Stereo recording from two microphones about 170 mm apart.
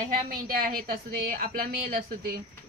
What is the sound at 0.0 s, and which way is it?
Speech, 55° right (ahead or behind).